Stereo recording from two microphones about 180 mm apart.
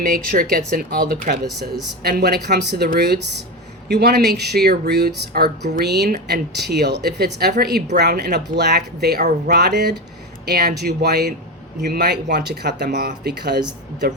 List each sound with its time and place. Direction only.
0.0 s speech: 50° right (ahead or behind); by 14.2 s 65° right (ahead or behind)